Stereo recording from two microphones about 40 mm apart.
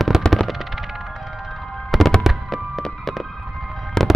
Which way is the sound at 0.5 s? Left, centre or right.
Centre.